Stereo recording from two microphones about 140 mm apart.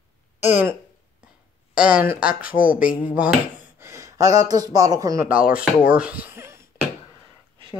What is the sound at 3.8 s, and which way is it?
Speech, 20° right (ahead or behind).